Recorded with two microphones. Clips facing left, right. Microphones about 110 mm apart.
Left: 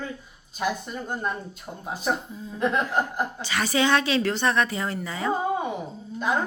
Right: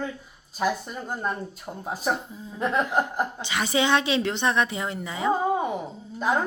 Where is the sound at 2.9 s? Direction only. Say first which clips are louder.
Right 1 dB; 15° right (ahead or behind).